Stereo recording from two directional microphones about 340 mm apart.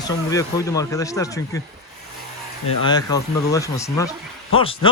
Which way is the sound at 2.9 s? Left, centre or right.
Centre.